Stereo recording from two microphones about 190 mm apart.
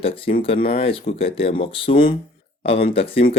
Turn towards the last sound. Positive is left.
turn(degrees=30)  # may be behind; listen again after turning